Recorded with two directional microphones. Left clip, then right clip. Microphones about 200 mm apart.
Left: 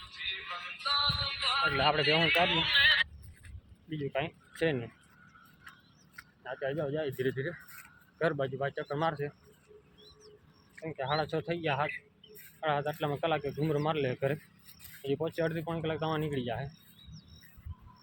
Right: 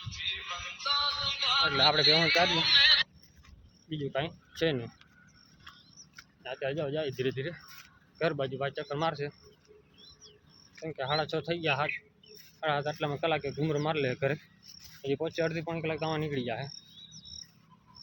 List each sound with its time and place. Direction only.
0.0 s music: 5° left (ahead or behind)
1.6 s speech: 10° right (ahead or behind)
2.2 s speech: 25° right (ahead or behind)
6.1 s speech: centre (ahead or behind)
10.8 s speech: 10° right (ahead or behind)